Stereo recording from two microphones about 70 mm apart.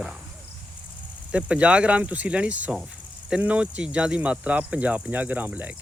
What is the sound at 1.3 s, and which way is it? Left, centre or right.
Speech, centre.